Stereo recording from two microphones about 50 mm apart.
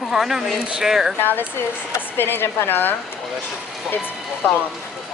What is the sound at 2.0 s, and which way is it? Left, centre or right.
Speech, left.